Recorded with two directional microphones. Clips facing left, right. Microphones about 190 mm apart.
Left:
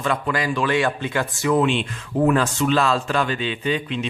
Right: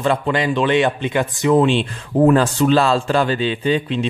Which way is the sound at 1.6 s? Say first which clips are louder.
Right 4 dB; 35° right (ahead or behind).